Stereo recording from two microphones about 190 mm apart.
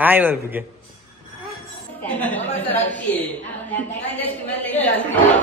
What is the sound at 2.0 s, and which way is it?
A woman's voice, 10° left (ahead or behind).